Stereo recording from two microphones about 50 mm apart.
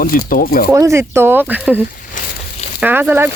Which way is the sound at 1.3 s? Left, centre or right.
Right.